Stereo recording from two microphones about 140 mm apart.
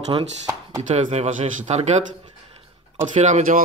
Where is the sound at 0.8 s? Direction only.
55° right (ahead or behind).